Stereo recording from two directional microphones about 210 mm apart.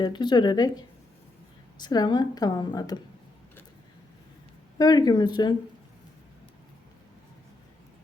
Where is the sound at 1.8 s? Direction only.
20° left (ahead or behind).